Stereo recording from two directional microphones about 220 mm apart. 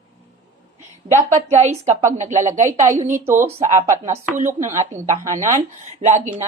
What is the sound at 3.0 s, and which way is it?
Speech, 10° right (ahead or behind).